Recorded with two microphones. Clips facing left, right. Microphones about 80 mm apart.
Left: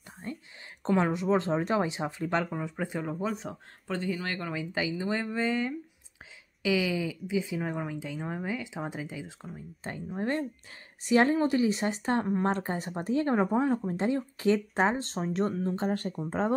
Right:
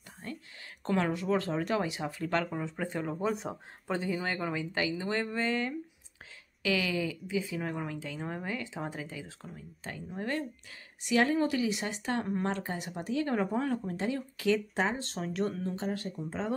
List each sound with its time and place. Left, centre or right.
0.2 s whispering: left
0.8 s speech: centre
2.4 s speech: centre
9.8 s speech: left
15.6 s speech: left